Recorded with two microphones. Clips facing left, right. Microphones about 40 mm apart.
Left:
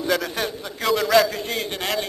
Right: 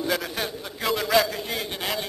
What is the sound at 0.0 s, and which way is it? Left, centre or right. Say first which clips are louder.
A man's voice: left 4 dB; centre.